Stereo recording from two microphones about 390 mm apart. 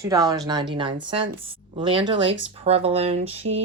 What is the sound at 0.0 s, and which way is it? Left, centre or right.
Speech, centre.